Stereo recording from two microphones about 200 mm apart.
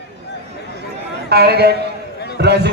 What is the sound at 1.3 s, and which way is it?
A man's voice, 55° right (ahead or behind).